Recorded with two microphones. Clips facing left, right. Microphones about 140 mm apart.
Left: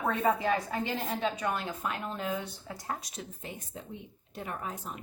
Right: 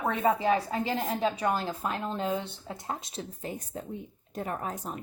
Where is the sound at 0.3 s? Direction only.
25° right (ahead or behind).